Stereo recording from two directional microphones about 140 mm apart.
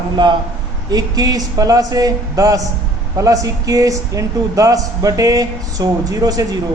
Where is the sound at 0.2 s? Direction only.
35° right (ahead or behind).